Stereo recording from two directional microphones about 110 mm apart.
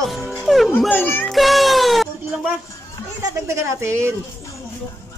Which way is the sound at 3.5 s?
25° right (ahead or behind).